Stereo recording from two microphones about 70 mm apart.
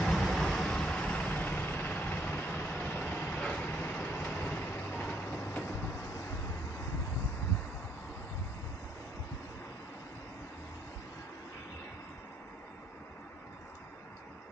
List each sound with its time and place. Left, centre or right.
0.0 s vehicle: centre
3.9 s train: centre